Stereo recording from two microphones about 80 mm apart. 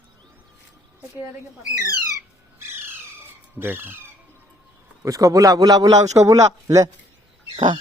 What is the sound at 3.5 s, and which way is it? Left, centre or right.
Speech, right.